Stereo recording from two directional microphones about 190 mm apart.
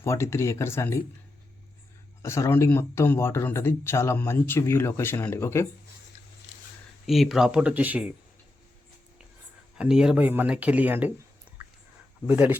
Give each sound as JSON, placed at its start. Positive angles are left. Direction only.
{"t": 0.0, "sound": "speech", "side_deg": 15}
{"t": 2.2, "sound": "speech", "side_deg": 15}
{"t": 7.1, "sound": "speech", "side_deg": 0}
{"t": 9.7, "sound": "speech", "side_deg": -5}
{"t": 12.3, "sound": "speech", "side_deg": -10}